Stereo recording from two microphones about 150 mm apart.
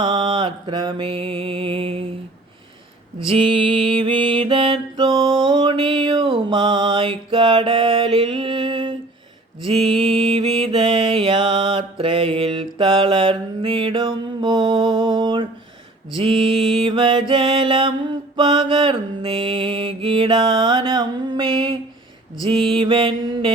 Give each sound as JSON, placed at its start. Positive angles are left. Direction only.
{"t": 0.0, "sound": "mantra", "side_deg": -30}
{"t": 3.2, "sound": "mantra", "side_deg": -35}